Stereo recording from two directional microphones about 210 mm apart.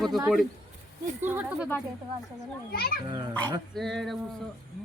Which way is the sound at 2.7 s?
50° left (ahead or behind).